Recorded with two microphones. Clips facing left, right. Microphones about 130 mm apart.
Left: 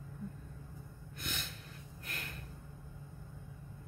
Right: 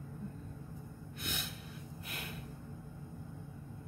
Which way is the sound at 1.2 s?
5° right (ahead or behind).